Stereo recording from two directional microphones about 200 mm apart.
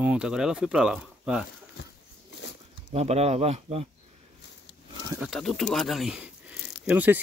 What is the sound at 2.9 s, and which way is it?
Speech, 30° right (ahead or behind).